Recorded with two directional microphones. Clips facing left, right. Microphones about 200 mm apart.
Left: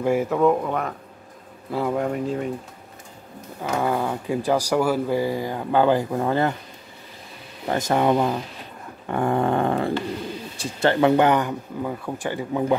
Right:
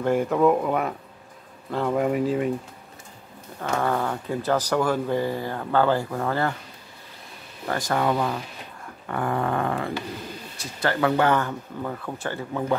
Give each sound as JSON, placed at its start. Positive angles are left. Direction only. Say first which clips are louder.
{"t": 0.0, "sound": "speech", "louder": "left 1 dB", "side_deg": 5}
{"t": 1.7, "sound": "speech", "louder": "even", "side_deg": 5}
{"t": 2.0, "sound": "speech", "louder": "right 2 dB", "side_deg": -5}
{"t": 3.6, "sound": "speech", "louder": "left 1 dB", "side_deg": 10}
{"t": 7.6, "sound": "dog", "louder": "left 4 dB", "side_deg": 25}
{"t": 10.6, "sound": "speech", "louder": "left 5 dB", "side_deg": 25}